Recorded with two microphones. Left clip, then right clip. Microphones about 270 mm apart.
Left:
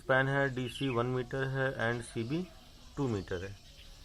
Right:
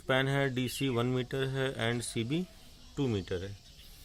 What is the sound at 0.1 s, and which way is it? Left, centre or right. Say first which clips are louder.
Speech: left 1 dB; right.